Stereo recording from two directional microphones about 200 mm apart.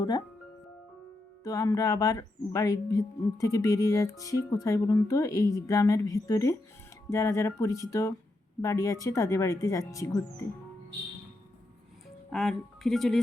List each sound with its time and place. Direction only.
1.5 s speech: 15° left (ahead or behind)
12.3 s speech: centre (ahead or behind)